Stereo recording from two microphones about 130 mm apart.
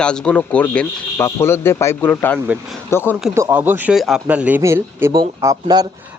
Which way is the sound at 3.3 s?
20° right (ahead or behind).